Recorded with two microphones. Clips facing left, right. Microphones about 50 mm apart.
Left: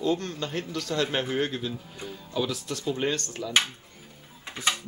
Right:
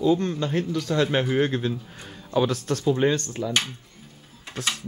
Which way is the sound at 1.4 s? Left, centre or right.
Right.